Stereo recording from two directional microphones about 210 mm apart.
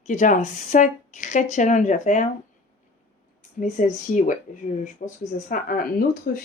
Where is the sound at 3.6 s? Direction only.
35° left (ahead or behind).